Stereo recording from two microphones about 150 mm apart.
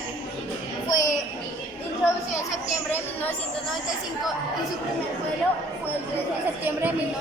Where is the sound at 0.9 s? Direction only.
25° left (ahead or behind).